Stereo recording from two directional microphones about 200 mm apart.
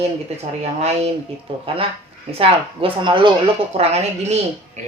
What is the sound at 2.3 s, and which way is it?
Speech, 30° right (ahead or behind).